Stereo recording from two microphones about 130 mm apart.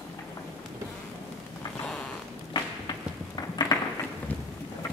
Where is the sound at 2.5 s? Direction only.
30° left (ahead or behind).